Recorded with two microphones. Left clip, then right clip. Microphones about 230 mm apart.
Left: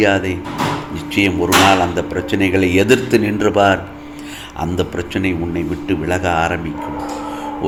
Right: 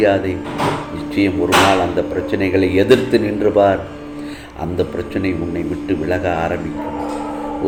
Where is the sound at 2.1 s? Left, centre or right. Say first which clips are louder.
Even; left.